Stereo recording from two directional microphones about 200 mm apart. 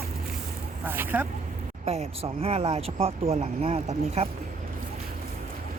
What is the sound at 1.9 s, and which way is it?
Speech, 30° right (ahead or behind).